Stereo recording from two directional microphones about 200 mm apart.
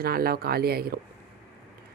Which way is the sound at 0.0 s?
50° right (ahead or behind).